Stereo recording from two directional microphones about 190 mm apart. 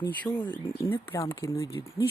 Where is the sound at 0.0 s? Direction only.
20° left (ahead or behind).